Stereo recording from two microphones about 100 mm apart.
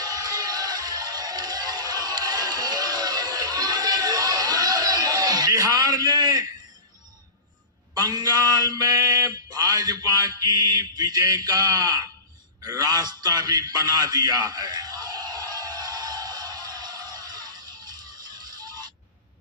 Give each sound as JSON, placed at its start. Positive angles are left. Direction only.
{"t": 0.0, "sound": "music", "side_deg": -40}
{"t": 7.9, "sound": "mantra", "side_deg": -40}
{"t": 12.6, "sound": "a sound", "side_deg": -40}